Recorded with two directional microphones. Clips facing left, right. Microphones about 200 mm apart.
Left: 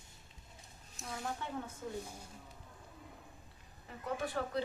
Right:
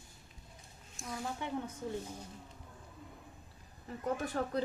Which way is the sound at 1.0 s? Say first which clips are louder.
Right 2 dB; centre (ahead or behind).